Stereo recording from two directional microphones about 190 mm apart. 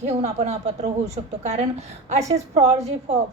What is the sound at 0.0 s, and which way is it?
A woman's voice, 35° right (ahead or behind).